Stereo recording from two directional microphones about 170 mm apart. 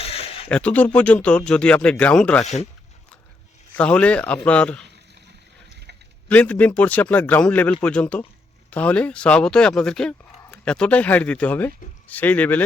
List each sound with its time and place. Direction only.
0.0 s a sound: 35° left (ahead or behind)
0.4 s speech: 10° left (ahead or behind)
2.4 s speech: 40° left (ahead or behind)
3.8 s speech: 5° left (ahead or behind)
6.2 s speech: 10° left (ahead or behind)